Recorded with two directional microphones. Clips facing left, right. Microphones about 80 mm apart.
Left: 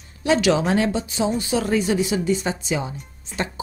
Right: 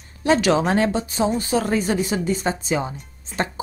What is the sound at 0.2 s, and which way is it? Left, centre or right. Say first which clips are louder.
Speech: right 1 dB; right.